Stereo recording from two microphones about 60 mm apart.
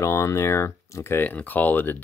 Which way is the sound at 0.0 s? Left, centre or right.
Left.